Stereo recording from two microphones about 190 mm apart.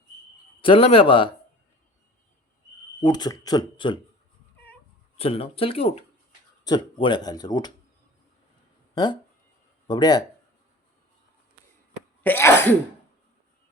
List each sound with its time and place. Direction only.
0.6 s speech: 30° left (ahead or behind)
3.0 s speech: 20° left (ahead or behind)
5.1 s speech: 30° left (ahead or behind)
9.8 s speech: 20° left (ahead or behind)
12.2 s cough: 10° left (ahead or behind)